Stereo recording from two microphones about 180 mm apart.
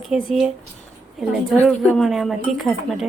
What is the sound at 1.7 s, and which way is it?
A woman's voice, centre (ahead or behind).